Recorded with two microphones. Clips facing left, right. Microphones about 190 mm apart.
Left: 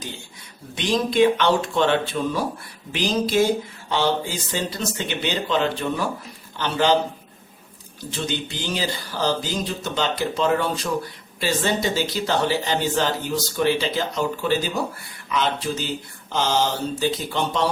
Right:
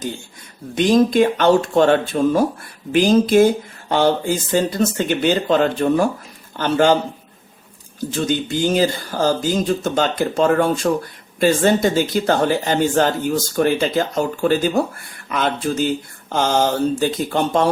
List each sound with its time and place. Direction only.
0.8 s speech: 45° right (ahead or behind)
8.1 s speech: 45° right (ahead or behind)